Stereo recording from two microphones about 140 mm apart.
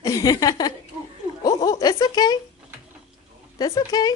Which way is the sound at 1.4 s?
30° left (ahead or behind).